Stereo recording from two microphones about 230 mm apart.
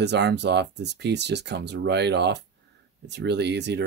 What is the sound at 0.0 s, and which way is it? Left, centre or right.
Speech, right.